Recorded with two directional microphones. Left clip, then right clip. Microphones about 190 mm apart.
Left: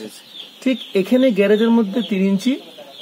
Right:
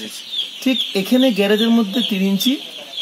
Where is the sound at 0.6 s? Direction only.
25° left (ahead or behind).